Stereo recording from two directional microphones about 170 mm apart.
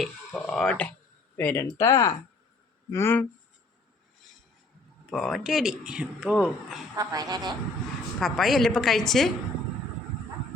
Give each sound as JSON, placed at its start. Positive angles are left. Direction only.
{"t": 0.0, "sound": "a sound", "side_deg": 0}
{"t": 1.4, "sound": "speech", "side_deg": 10}
{"t": 1.6, "sound": "speech", "side_deg": 20}
{"t": 5.1, "sound": "speech", "side_deg": 0}
{"t": 6.9, "sound": "a woman's voice", "side_deg": -20}
{"t": 8.2, "sound": "speech", "side_deg": 0}